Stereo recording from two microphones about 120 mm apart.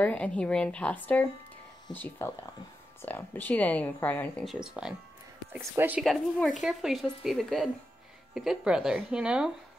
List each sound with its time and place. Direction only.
0.0 s speech: 10° left (ahead or behind)
4.5 s speech: 5° right (ahead or behind)
6.6 s speech: centre (ahead or behind)